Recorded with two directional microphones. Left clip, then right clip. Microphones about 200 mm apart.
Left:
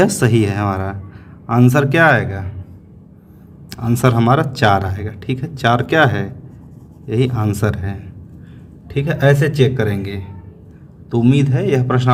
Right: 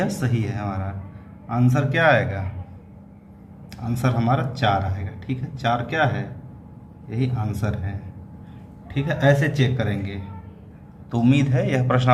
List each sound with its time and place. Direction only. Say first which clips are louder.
0.0 s speech: left 12 dB; 55° left (ahead or behind)
3.7 s a man's voice: left 9 dB; 55° left (ahead or behind)
11.1 s a man's voice: left 5 dB; 35° left (ahead or behind)